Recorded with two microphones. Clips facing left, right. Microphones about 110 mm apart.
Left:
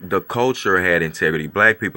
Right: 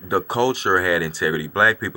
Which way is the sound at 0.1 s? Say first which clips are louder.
Left 1 dB; 20° right (ahead or behind).